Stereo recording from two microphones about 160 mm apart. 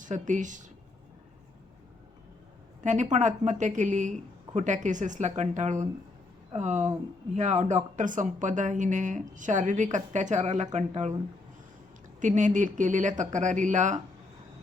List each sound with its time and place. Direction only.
0.0 s speech: 50° right (ahead or behind)
2.8 s speech: 50° right (ahead or behind)
12.2 s speech: 50° right (ahead or behind)